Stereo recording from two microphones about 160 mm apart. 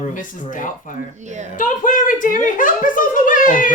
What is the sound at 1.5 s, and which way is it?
A woman's voice, 55° left (ahead or behind).